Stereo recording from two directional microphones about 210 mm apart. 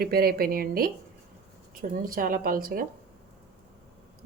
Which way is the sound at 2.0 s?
40° right (ahead or behind).